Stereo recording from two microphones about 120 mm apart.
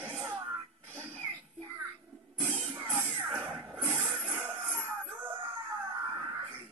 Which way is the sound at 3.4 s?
10° right (ahead or behind).